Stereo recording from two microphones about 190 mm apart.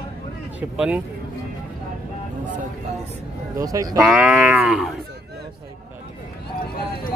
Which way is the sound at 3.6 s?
15° right (ahead or behind).